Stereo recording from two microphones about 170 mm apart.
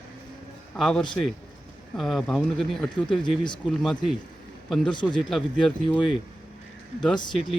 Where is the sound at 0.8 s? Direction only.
5° left (ahead or behind).